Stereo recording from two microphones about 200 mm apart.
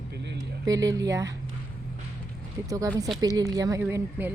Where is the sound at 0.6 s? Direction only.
15° right (ahead or behind).